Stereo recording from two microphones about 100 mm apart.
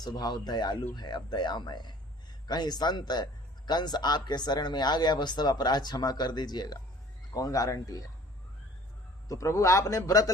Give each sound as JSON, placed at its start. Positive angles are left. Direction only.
{"t": 0.0, "sound": "speech", "side_deg": 45}
{"t": 9.3, "sound": "speech", "side_deg": 30}